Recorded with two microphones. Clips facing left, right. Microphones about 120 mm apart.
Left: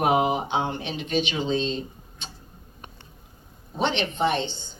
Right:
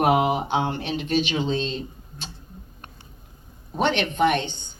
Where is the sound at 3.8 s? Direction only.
55° right (ahead or behind).